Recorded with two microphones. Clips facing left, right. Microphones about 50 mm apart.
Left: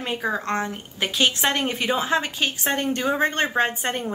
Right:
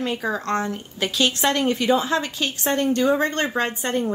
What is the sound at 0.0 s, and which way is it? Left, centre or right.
Speech, left.